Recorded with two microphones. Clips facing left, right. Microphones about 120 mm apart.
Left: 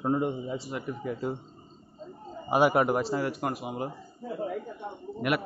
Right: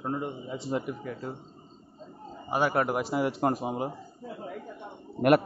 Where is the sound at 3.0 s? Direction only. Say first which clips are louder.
Right 3 dB; 15° right (ahead or behind).